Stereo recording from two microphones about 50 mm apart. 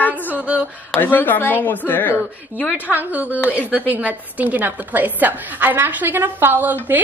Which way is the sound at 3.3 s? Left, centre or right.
Left.